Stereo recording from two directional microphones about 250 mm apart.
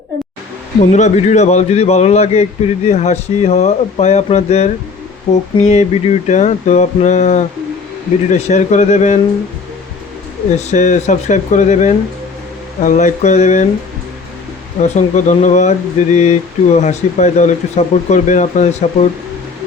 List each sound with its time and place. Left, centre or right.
0.8 s speech: left
10.7 s speech: left
14.8 s speech: left